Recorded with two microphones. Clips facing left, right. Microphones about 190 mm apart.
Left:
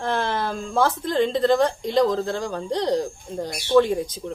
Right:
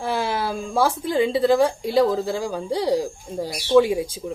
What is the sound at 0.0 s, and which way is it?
Speech, 10° right (ahead or behind).